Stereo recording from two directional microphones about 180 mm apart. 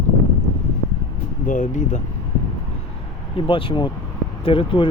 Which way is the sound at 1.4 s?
45° left (ahead or behind).